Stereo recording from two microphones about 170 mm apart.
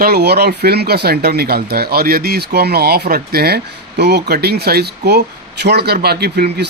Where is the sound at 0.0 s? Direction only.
70° right (ahead or behind).